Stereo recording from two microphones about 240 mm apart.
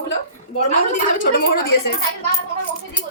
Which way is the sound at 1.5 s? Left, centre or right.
Left.